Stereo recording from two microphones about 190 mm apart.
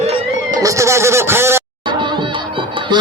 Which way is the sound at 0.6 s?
15° right (ahead or behind).